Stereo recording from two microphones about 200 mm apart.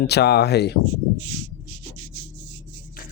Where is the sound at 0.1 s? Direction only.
55° left (ahead or behind).